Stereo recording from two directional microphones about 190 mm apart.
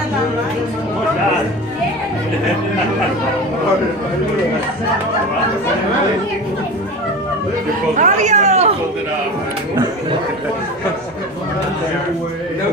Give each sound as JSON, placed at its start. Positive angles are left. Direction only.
{"t": 8.0, "sound": "speech", "side_deg": -40}